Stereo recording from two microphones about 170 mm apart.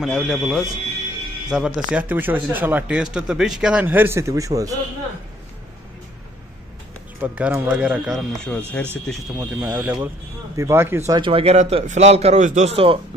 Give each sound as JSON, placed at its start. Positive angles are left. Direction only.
{"t": 0.0, "sound": "speech", "side_deg": 0}
{"t": 7.2, "sound": "speech", "side_deg": -10}
{"t": 9.4, "sound": "speech", "side_deg": -10}
{"t": 11.1, "sound": "a man's voice", "side_deg": -30}